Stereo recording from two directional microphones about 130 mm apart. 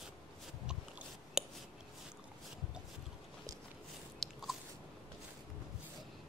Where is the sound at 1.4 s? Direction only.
5° right (ahead or behind).